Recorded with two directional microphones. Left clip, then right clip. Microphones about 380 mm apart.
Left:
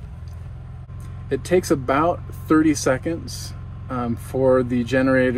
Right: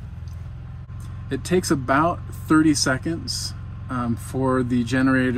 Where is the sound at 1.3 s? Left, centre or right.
Right.